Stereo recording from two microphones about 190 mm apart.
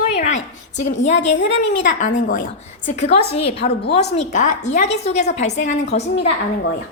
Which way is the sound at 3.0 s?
60° left (ahead or behind).